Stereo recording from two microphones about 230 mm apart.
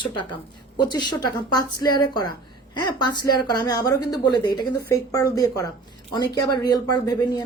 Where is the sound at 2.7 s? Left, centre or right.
Centre.